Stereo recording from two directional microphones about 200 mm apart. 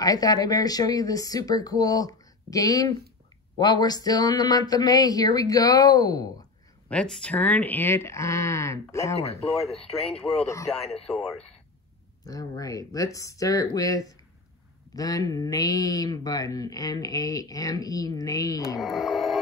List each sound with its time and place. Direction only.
0.0 s speech: 20° left (ahead or behind)
6.9 s speech: 5° left (ahead or behind)
9.2 s speech: 30° left (ahead or behind)
10.0 s speech: 5° left (ahead or behind)
10.4 s speech: 15° left (ahead or behind)
11.1 s speech: centre (ahead or behind)
12.3 s speech: 15° left (ahead or behind)
18.8 s speech: centre (ahead or behind)